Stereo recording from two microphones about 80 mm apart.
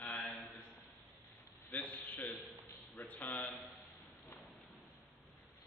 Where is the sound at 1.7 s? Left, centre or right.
Centre.